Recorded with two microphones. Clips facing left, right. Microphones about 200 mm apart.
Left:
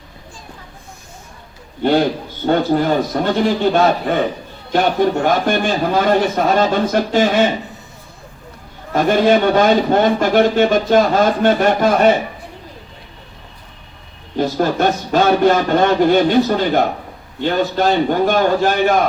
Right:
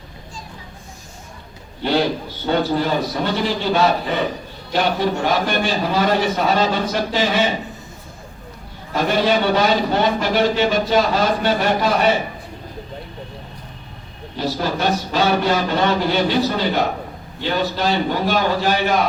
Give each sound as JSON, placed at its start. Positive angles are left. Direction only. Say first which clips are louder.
{"t": 2.5, "sound": "a man's voice", "louder": "left 4 dB", "side_deg": 50}
{"t": 8.9, "sound": "a man's voice", "louder": "left 5 dB", "side_deg": 50}
{"t": 14.3, "sound": "a man's voice", "louder": "left 6 dB", "side_deg": 50}